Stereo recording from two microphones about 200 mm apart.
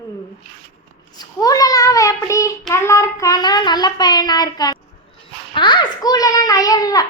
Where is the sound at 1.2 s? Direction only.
20° left (ahead or behind).